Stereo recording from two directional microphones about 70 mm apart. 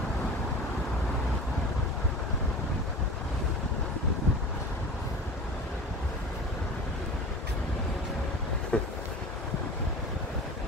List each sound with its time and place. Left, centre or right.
8.7 s vehicle: centre